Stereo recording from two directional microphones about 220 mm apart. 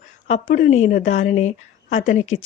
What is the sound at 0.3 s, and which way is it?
Speech, 35° left (ahead or behind).